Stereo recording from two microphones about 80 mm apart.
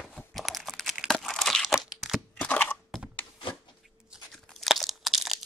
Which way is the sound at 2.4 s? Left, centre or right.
Centre.